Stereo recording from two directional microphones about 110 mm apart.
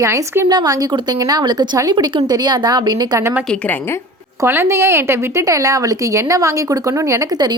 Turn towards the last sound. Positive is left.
turn(degrees=-40)  # may be behind; listen again after turning